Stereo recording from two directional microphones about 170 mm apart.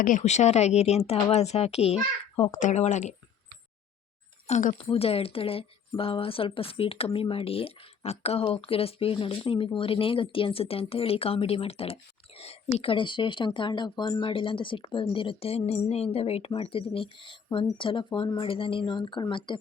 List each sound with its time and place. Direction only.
0.0 s speech: 45° left (ahead or behind)
4.4 s speech: 40° left (ahead or behind)